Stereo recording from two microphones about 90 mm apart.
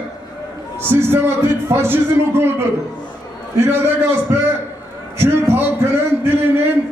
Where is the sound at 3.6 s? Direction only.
25° right (ahead or behind).